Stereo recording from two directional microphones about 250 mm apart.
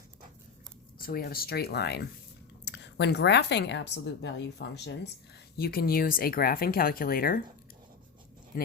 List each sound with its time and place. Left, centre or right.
0.9 s a woman's voice: left
8.5 s speech: left